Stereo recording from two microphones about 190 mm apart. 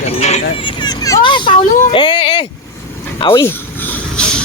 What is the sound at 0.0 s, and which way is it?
Speech, 35° left (ahead or behind).